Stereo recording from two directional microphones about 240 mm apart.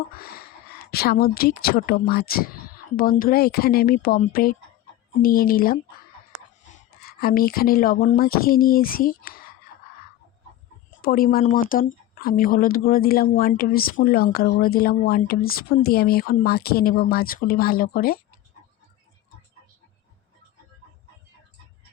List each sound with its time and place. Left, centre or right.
0.1 s a woman's voice: left
11.0 s speech: left